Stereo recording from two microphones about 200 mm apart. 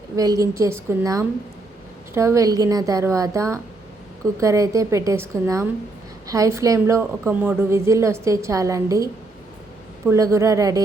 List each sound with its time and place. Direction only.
0.2 s a woman's voice: 15° right (ahead or behind)
10.1 s a woman's voice: 15° right (ahead or behind)